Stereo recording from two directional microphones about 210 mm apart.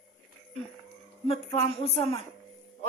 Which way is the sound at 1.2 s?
25° left (ahead or behind).